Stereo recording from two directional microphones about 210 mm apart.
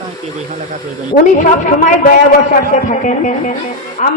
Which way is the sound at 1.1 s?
40° left (ahead or behind).